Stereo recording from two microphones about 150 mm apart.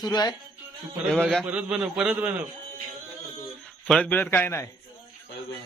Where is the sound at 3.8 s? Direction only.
5° left (ahead or behind).